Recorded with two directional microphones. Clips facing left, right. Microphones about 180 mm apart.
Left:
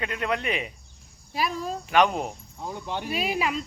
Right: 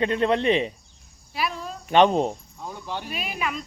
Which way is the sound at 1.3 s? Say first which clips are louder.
Left 1 dB; 40° left (ahead or behind).